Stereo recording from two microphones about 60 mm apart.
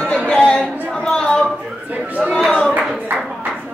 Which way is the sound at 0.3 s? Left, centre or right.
Centre.